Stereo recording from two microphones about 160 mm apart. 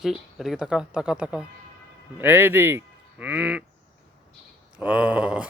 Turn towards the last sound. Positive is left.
turn(degrees=-10)  # may be behind; listen again after turning